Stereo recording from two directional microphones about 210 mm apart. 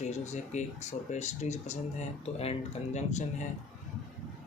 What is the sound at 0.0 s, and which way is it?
Speech, 35° left (ahead or behind).